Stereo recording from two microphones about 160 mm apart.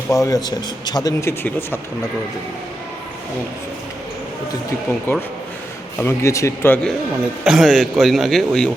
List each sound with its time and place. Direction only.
0.1 s speech: 20° left (ahead or behind)
5.1 s speech: 15° left (ahead or behind)
7.4 s a man's voice: centre (ahead or behind)